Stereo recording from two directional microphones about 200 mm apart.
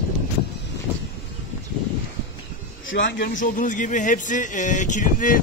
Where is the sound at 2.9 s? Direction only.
65° left (ahead or behind).